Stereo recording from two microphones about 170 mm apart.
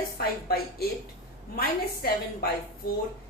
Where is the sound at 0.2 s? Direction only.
65° left (ahead or behind).